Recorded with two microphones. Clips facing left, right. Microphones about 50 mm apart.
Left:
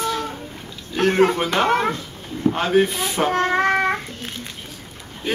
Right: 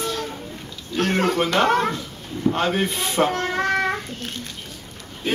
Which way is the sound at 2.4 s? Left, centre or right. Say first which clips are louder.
Left 3 dB; centre.